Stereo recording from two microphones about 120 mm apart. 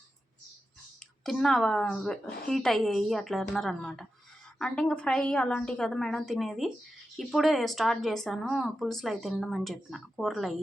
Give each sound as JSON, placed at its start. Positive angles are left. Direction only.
{"t": 1.2, "sound": "speech", "side_deg": 5}